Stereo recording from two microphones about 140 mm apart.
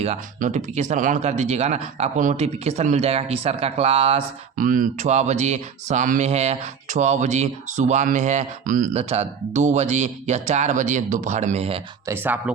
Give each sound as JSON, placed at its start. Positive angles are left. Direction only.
{"t": 0.3, "sound": "speech", "side_deg": -60}
{"t": 4.5, "sound": "speech", "side_deg": -75}
{"t": 12.0, "sound": "speech", "side_deg": -15}